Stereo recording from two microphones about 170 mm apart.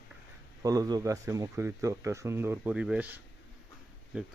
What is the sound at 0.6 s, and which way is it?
Speech, 20° right (ahead or behind).